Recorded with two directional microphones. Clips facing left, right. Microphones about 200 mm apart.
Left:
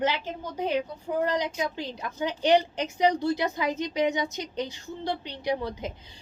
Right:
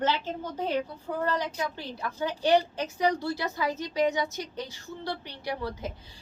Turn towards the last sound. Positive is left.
turn(degrees=20)  # may be behind; listen again after turning